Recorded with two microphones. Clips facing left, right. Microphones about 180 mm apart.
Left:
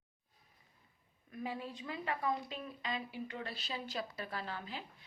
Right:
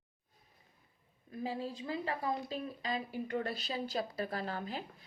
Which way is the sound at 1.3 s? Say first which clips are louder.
Right 3 dB; 30° right (ahead or behind).